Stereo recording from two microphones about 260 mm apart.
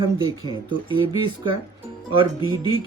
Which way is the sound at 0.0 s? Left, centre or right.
Centre.